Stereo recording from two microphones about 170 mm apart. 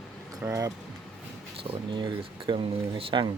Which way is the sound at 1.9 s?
30° right (ahead or behind).